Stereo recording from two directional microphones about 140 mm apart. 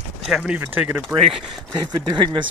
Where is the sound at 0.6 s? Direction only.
10° right (ahead or behind).